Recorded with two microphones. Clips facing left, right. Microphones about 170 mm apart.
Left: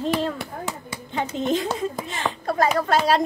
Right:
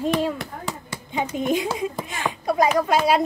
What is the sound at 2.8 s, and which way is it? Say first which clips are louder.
Speech: right 1 dB; 10° right (ahead or behind).